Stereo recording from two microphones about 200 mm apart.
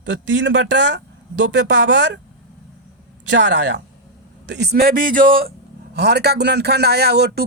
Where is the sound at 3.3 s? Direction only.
60° right (ahead or behind).